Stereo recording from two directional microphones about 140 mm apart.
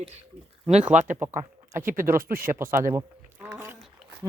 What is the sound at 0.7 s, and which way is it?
Speech, 55° right (ahead or behind).